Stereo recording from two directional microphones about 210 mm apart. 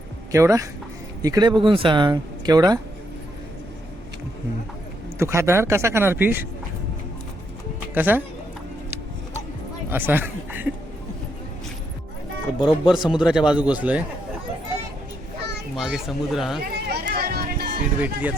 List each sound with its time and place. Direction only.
0.3 s speech: 15° right (ahead or behind)
5.2 s speech: 15° right (ahead or behind)
7.9 s speech: 10° right (ahead or behind)
9.9 s a man's voice: 10° right (ahead or behind)
12.5 s speech: 20° left (ahead or behind)
12.9 s speech: 5° right (ahead or behind)
15.7 s speech: centre (ahead or behind)
16.9 s a sound: 50° right (ahead or behind)
18.0 s speech: 5° right (ahead or behind)